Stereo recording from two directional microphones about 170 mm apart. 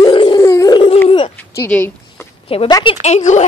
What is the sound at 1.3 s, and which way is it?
Speech, 10° left (ahead or behind).